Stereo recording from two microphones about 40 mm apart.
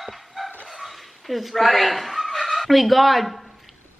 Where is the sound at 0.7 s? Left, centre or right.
Centre.